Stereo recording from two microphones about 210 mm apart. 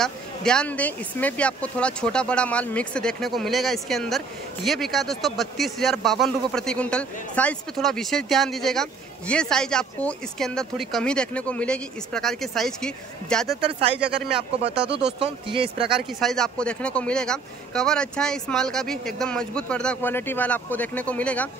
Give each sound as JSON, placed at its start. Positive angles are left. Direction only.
{"t": 0.0, "sound": "speech", "side_deg": 5}
{"t": 13.6, "sound": "speech", "side_deg": -25}
{"t": 13.9, "sound": "speech", "side_deg": -5}
{"t": 15.0, "sound": "speech", "side_deg": -25}
{"t": 16.0, "sound": "speech", "side_deg": 0}